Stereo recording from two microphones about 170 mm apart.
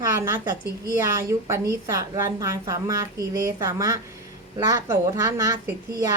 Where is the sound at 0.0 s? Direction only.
15° right (ahead or behind).